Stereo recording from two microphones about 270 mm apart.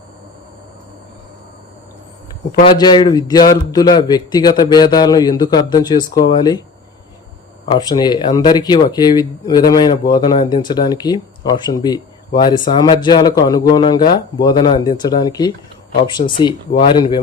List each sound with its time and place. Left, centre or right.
2.6 s speech: centre
7.7 s speech: centre